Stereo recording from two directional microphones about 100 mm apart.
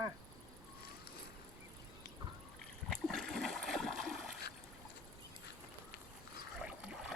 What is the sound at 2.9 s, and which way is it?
Splash, 5° left (ahead or behind).